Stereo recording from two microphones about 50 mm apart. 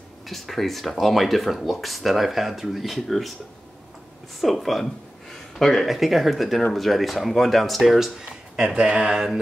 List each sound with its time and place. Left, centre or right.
0.3 s speech: centre
4.4 s speech: centre
5.9 s speech: centre
8.5 s speech: centre